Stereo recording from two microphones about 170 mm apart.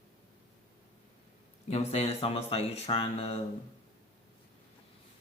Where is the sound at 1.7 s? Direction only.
40° left (ahead or behind).